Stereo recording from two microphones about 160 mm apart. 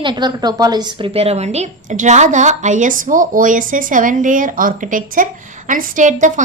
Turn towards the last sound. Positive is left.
turn(degrees=-50)  # may be behind; listen again after turning